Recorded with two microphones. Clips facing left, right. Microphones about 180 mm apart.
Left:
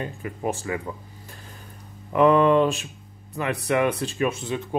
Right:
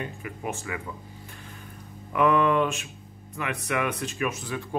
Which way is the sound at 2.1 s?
30° left (ahead or behind).